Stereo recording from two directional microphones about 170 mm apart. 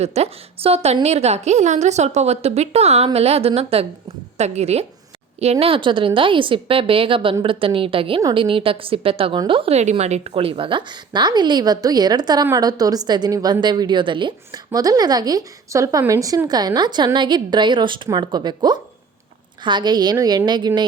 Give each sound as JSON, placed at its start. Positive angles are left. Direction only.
{"t": 0.0, "sound": "a woman's voice", "side_deg": -40}